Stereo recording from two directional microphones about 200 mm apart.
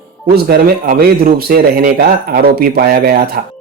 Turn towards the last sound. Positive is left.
turn(degrees=-50)  # may be behind; listen again after turning